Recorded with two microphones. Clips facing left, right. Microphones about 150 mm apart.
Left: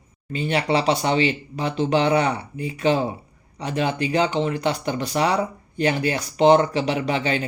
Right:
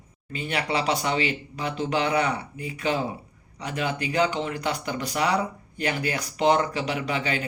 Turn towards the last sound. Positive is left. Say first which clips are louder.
# left 5 dB
turn(degrees=30)  # may be behind; listen again after turning